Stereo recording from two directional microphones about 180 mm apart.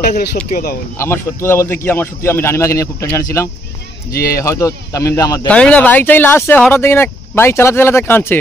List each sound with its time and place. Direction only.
0.5 s speech: 50° left (ahead or behind)
0.9 s speech: 15° left (ahead or behind)
5.5 s speech: 5° left (ahead or behind)